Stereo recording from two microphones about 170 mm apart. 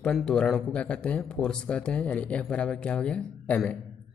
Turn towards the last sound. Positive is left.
turn(degrees=5)  # may be behind; listen again after turning